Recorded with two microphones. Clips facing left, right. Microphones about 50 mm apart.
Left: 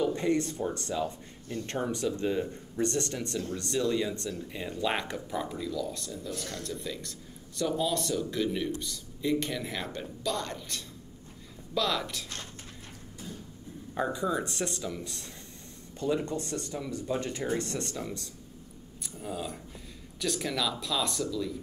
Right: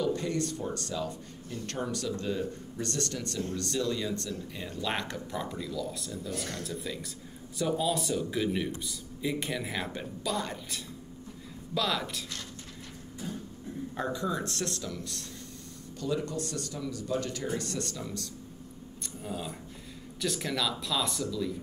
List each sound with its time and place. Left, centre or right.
0.0 s speech: left; by 12.3 s centre
13.9 s speech: centre
19.2 s speech: centre